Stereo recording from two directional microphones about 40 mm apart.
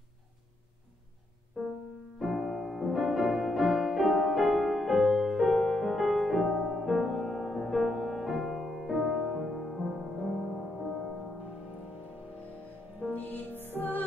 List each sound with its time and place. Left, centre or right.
1.6 s music: right
2.1 s music: centre
13.1 s music: left